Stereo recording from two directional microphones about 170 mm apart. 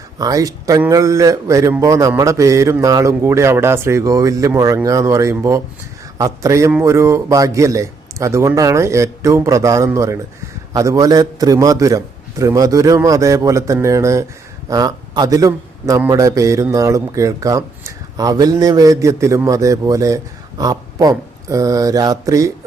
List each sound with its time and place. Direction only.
0.2 s a man's voice: 20° right (ahead or behind)